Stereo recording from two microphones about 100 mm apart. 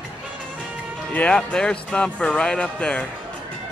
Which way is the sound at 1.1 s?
10° left (ahead or behind).